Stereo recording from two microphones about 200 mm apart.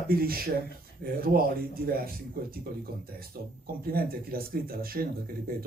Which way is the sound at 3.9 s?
50° right (ahead or behind).